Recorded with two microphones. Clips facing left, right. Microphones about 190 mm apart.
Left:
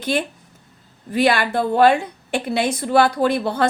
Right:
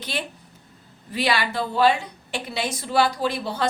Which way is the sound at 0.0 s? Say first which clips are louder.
Left 9 dB; 50° left (ahead or behind).